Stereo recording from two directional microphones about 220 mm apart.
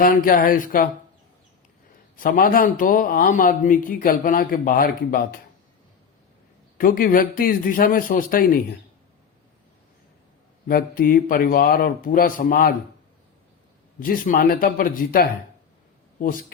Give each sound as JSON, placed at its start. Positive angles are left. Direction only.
{"t": 0.0, "sound": "speech", "side_deg": 40}
{"t": 2.1, "sound": "speech", "side_deg": 40}
{"t": 6.7, "sound": "speech", "side_deg": 40}
{"t": 10.7, "sound": "speech", "side_deg": 40}
{"t": 14.0, "sound": "speech", "side_deg": 40}